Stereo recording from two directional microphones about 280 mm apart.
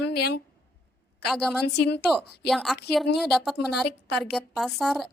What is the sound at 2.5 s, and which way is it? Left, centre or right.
A woman's voice, centre.